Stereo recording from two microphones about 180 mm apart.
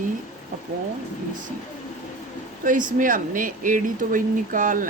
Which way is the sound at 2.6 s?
45° right (ahead or behind).